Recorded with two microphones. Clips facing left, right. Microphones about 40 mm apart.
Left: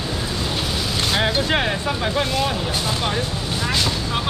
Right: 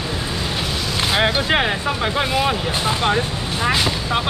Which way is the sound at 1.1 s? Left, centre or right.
Centre.